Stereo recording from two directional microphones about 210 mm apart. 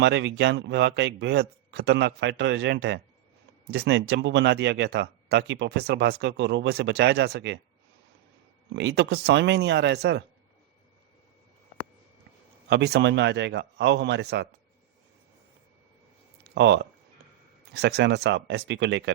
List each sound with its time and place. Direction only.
0.0 s speech: 60° right (ahead or behind)
8.7 s speech: 55° right (ahead or behind)
12.6 s speech: 50° right (ahead or behind)
16.4 s a sound: 55° right (ahead or behind)
17.7 s speech: 55° right (ahead or behind)